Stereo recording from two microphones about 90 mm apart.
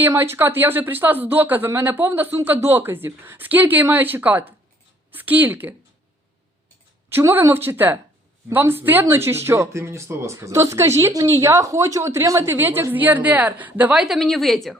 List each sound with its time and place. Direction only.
0.1 s speech: 25° right (ahead or behind)
7.1 s speech: 30° right (ahead or behind)
13.9 s a woman's voice: 5° right (ahead or behind)